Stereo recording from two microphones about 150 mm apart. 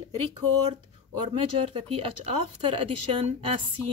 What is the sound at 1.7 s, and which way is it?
Speech, 40° right (ahead or behind).